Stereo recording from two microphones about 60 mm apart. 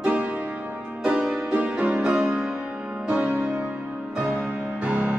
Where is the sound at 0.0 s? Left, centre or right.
Right.